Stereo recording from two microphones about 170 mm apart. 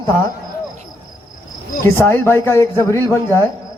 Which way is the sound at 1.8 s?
15° left (ahead or behind).